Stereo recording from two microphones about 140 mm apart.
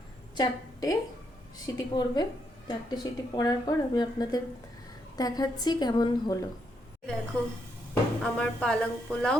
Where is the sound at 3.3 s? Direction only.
30° left (ahead or behind).